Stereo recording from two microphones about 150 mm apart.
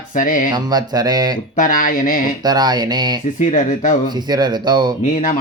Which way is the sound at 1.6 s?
65° left (ahead or behind).